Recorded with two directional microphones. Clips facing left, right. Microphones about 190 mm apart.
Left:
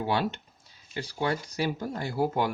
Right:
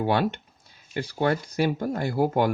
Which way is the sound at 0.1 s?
55° right (ahead or behind).